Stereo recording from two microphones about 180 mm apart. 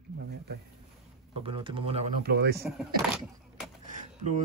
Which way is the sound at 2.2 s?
60° right (ahead or behind).